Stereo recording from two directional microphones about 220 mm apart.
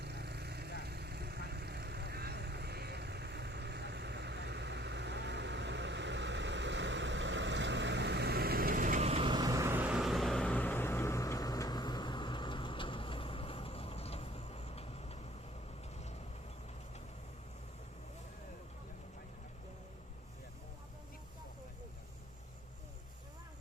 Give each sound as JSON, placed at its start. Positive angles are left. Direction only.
{"t": 0.0, "sound": "vehicle", "side_deg": -50}